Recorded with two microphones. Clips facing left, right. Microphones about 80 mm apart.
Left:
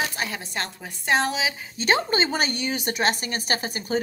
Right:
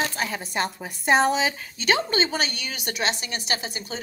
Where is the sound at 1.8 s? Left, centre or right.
Left.